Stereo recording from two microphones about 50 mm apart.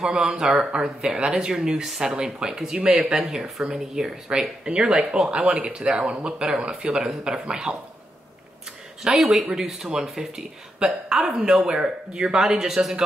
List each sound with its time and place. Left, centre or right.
0.1 s speech: centre
0.5 s speech: right
0.8 s speech: centre
2.8 s speech: centre
3.1 s speech: centre
9.0 s speech: centre